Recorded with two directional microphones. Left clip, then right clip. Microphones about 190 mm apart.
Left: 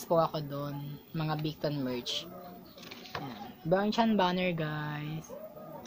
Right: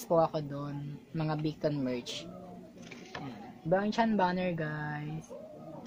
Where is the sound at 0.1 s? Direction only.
5° right (ahead or behind).